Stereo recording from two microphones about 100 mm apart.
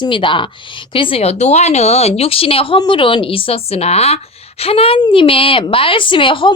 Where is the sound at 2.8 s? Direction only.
55° left (ahead or behind); by 4.2 s 90° left.